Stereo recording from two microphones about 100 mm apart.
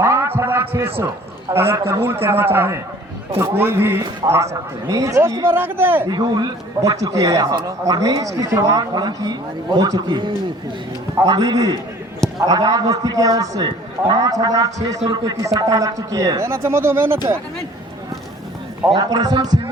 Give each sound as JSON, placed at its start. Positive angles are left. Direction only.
{"t": 0.0, "sound": "a man's voice", "side_deg": -30}
{"t": 6.1, "sound": "speech", "side_deg": -45}
{"t": 8.9, "sound": "speech", "side_deg": -45}
{"t": 11.3, "sound": "speech", "side_deg": -40}
{"t": 18.9, "sound": "speech", "side_deg": -40}